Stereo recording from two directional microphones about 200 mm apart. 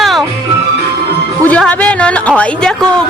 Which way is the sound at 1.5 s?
5° left (ahead or behind).